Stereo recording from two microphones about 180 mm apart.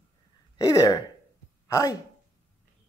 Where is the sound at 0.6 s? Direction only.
20° left (ahead or behind).